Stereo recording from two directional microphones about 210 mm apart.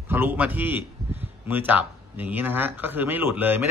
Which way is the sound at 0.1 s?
10° right (ahead or behind).